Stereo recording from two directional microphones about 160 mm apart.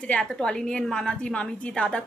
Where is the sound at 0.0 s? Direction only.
5° left (ahead or behind).